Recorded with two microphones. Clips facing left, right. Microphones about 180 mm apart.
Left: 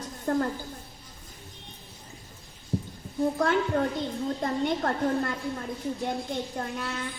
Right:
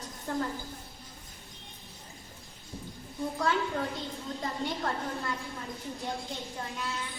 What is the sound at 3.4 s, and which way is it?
A woman's voice, 50° left (ahead or behind).